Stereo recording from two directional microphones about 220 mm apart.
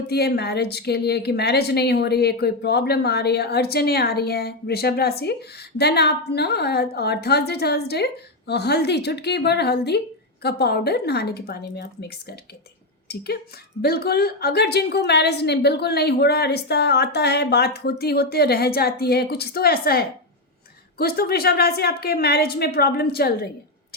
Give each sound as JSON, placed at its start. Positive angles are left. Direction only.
{"t": 0.1, "sound": "a woman's voice", "side_deg": 45}